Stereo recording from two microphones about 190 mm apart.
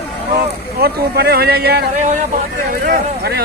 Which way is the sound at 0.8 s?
55° right (ahead or behind).